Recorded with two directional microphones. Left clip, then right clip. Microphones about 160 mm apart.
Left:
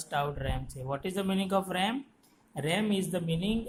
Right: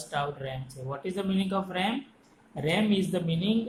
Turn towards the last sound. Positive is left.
turn(degrees=40)  # may be behind; listen again after turning